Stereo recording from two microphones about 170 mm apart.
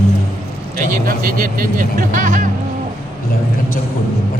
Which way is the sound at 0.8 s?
50° right (ahead or behind).